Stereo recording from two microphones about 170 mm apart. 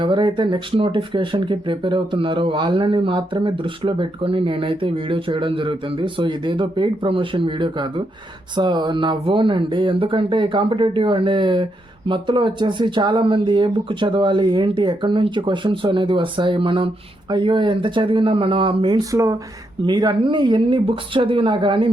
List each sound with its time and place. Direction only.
0.0 s speech: 30° right (ahead or behind)